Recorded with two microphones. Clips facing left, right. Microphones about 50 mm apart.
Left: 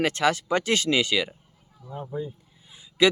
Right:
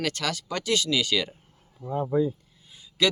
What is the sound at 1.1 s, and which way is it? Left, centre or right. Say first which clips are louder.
Speech: left 1 dB; centre.